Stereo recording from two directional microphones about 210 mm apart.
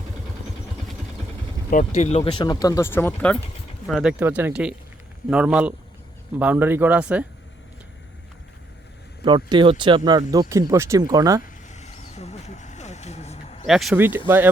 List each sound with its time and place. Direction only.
1.7 s speech: 35° left (ahead or behind); by 3.3 s 10° left (ahead or behind)
3.8 s speech: 5° right (ahead or behind)
9.2 s speech: 25° right (ahead or behind)
11.4 s vehicle: 35° left (ahead or behind)
13.7 s speech: centre (ahead or behind)